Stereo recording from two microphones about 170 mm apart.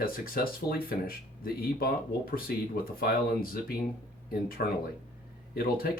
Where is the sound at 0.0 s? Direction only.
60° left (ahead or behind).